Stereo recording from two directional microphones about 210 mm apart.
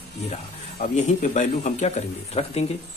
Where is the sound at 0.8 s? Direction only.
35° left (ahead or behind).